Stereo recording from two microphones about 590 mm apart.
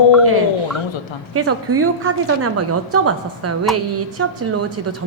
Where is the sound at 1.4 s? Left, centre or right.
Right.